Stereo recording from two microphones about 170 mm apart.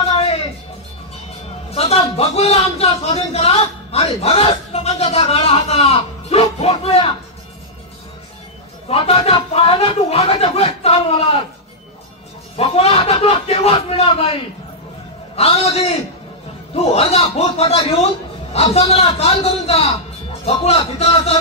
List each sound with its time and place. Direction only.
1.7 s a man's voice: 35° left (ahead or behind)
8.8 s speech: 35° left (ahead or behind)
12.5 s a man's voice: 35° left (ahead or behind)
15.3 s speech: 35° left (ahead or behind)